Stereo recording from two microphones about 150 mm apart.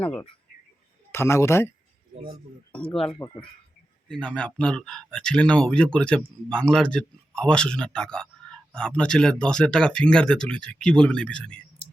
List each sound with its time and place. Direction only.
0.0 s a man's voice: 10° left (ahead or behind)
3.2 s speech: 30° left (ahead or behind)
4.1 s speech: 5° left (ahead or behind)